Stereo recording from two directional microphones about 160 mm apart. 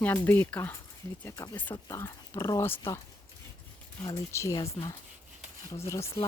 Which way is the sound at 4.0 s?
20° left (ahead or behind).